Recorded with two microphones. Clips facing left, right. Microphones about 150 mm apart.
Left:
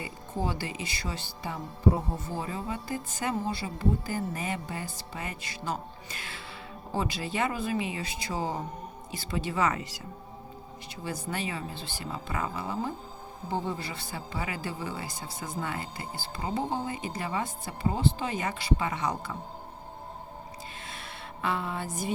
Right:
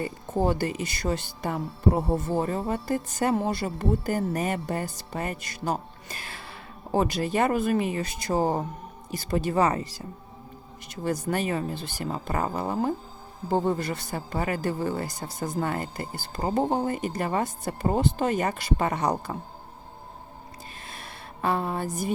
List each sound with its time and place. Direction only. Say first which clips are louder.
0.0 s speech: right 7 dB; 50° right (ahead or behind)
1.9 s speech: right 4 dB; 75° right (ahead or behind)
2.2 s speech: right 8 dB; 50° right (ahead or behind)
10.9 s speech: right 7 dB; 45° right (ahead or behind)
20.9 s a sound: even; 40° right (ahead or behind)